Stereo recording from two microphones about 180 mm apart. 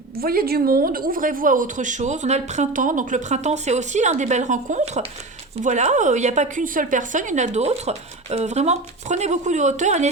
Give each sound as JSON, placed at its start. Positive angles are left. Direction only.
{"t": 0.2, "sound": "a woman's voice", "side_deg": -55}